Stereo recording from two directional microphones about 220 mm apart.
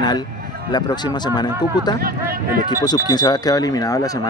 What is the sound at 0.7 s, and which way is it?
Speech, 20° left (ahead or behind).